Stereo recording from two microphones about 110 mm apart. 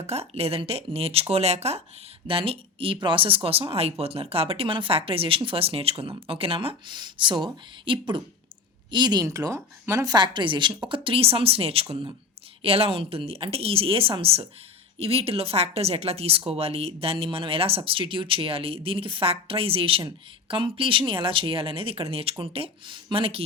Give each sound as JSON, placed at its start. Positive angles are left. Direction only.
{"t": 0.0, "sound": "speech", "side_deg": -70}
{"t": 2.2, "sound": "speech", "side_deg": -55}